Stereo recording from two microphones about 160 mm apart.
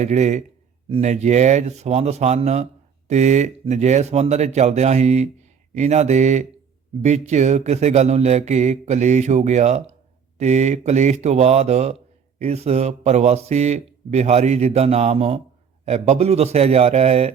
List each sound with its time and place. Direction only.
0.0 s a man's voice: 45° right (ahead or behind)